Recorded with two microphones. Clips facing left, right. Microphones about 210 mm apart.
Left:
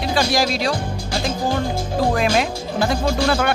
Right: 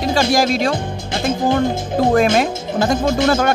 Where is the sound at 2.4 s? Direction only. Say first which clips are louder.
Right 3 dB; 45° right (ahead or behind).